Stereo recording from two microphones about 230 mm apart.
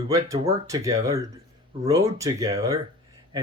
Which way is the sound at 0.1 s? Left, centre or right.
Centre.